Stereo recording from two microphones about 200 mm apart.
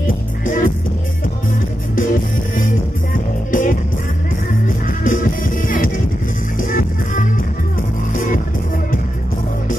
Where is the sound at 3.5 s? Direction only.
40° left (ahead or behind).